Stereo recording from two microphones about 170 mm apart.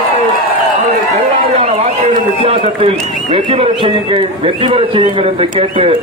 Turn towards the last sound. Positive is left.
turn(degrees=-30)  # may be behind; listen again after turning